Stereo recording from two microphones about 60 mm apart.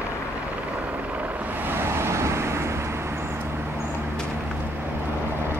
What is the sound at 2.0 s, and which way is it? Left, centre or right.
Vehicle, right.